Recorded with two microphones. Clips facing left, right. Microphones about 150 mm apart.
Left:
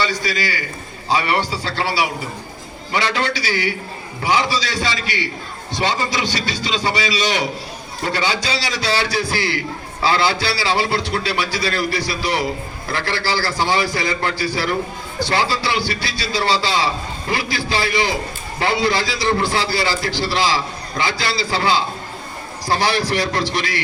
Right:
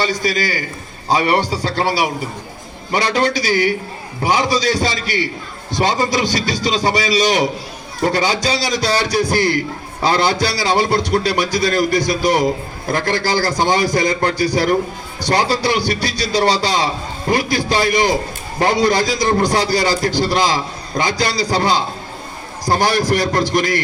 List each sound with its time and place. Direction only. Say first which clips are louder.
0.0 s a man's voice: right 3 dB; 45° right (ahead or behind)